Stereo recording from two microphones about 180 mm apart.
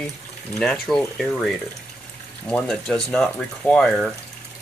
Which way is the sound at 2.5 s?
5° left (ahead or behind).